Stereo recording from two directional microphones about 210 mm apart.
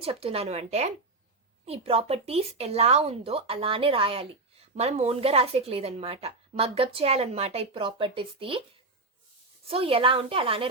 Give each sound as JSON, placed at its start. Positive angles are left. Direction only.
{"t": 0.0, "sound": "speech", "side_deg": -25}
{"t": 9.6, "sound": "speech", "side_deg": -25}